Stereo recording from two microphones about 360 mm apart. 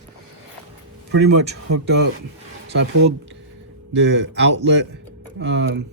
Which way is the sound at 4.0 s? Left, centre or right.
Right.